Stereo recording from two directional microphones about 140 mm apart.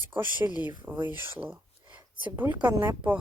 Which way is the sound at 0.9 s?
10° right (ahead or behind).